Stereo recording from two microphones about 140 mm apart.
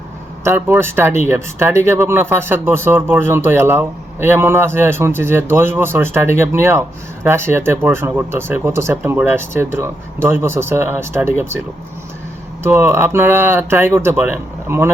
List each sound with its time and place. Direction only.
0.4 s speech: 15° right (ahead or behind)
12.6 s speech: 15° right (ahead or behind)